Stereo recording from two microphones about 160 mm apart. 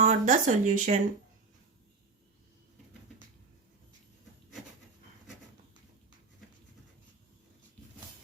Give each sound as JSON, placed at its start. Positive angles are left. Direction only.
{"t": 0.0, "sound": "speech", "side_deg": -50}